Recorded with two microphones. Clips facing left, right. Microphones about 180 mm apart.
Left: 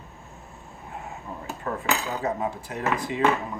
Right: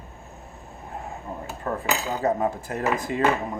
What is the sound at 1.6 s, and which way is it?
Cutlery, 40° right (ahead or behind).